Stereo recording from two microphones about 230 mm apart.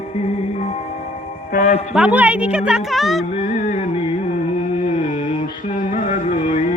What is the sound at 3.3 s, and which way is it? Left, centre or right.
Music, left.